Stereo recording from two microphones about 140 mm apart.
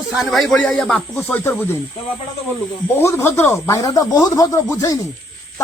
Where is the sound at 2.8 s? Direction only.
15° left (ahead or behind).